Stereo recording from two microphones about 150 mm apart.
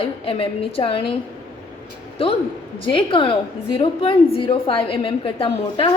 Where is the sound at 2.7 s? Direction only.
35° left (ahead or behind).